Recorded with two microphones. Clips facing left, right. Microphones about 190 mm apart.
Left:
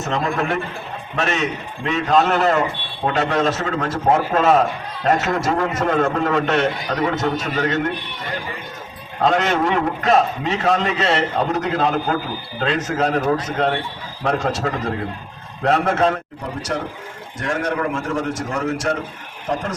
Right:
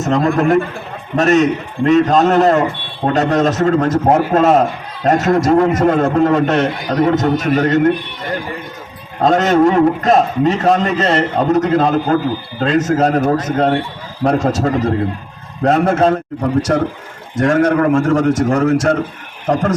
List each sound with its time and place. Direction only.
0.0 s a man's voice: 40° right (ahead or behind)
9.2 s a man's voice: 40° right (ahead or behind)